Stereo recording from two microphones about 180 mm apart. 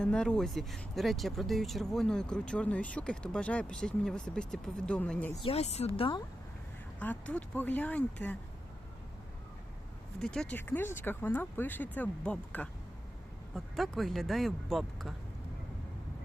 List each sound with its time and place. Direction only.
0.0 s speech: 5° left (ahead or behind)
5.4 s a woman's voice: 35° left (ahead or behind)
7.0 s speech: 10° left (ahead or behind)
10.2 s speech: 5° left (ahead or behind)